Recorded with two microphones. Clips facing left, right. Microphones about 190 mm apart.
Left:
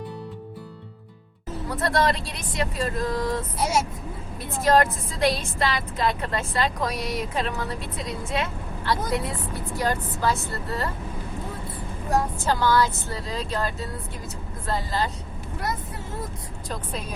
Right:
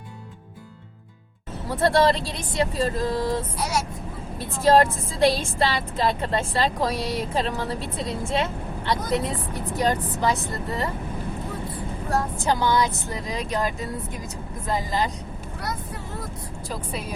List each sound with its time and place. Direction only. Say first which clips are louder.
1.7 s a woman's voice: right 4 dB; 30° right (ahead or behind)
3.6 s speech: left 2 dB; 25° left (ahead or behind)
4.6 s a woman's voice: right 2 dB; 30° right (ahead or behind)
9.7 s a woman's voice: right 3 dB; 20° right (ahead or behind)
12.5 s speech: even; 15° right (ahead or behind)